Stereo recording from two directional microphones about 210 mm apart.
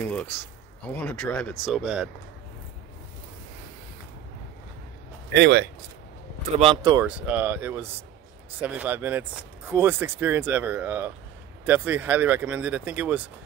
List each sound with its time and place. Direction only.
0.0 s a sound: 5° left (ahead or behind)
0.8 s speech: 5° left (ahead or behind)
5.4 s speech: 55° right (ahead or behind)
6.6 s speech: 20° right (ahead or behind)
7.1 s speech: 5° right (ahead or behind)